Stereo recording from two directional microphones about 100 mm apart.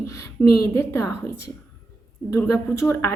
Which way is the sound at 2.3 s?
30° left (ahead or behind).